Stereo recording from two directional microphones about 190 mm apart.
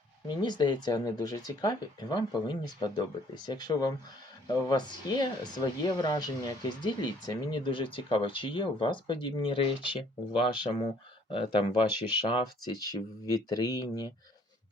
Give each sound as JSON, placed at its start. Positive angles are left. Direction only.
{"t": 0.3, "sound": "speech", "side_deg": 20}